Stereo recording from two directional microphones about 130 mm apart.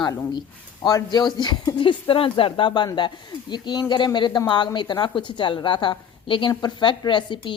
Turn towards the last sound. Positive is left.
turn(degrees=40)  # may be behind; listen again after turning